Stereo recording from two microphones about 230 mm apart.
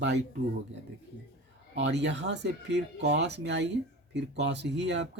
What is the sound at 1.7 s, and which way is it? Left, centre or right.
Speech, right.